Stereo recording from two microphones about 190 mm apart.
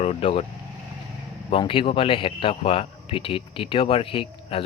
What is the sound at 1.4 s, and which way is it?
A man's voice, 25° left (ahead or behind).